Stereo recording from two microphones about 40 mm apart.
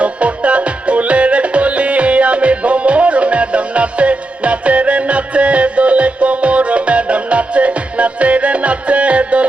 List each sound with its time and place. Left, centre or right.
0.0 s music: right